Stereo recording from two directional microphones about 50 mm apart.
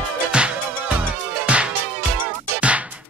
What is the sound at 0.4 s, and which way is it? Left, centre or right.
Music, right.